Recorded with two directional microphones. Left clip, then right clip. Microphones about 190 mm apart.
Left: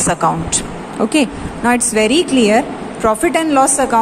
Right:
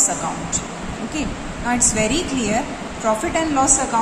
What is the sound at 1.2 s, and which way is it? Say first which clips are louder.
Speech: left 10 dB; 50° left (ahead or behind).